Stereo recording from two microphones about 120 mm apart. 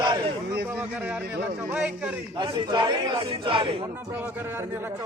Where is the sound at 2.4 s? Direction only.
40° right (ahead or behind).